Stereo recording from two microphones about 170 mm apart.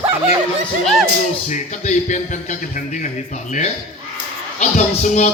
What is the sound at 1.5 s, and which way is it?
Speech, 45° left (ahead or behind).